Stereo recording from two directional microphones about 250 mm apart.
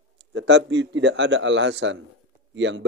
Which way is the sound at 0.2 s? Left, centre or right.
Right.